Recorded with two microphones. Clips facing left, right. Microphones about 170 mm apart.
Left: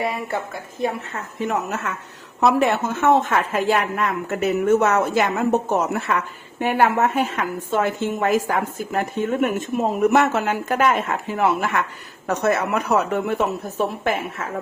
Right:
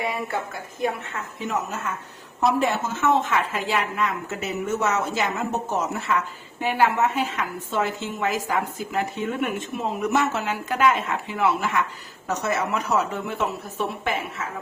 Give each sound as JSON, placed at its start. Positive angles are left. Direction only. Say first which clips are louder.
{"t": 0.8, "sound": "speech", "louder": "left 2 dB", "side_deg": 40}
{"t": 1.5, "sound": "a woman's voice", "louder": "left 3 dB", "side_deg": 70}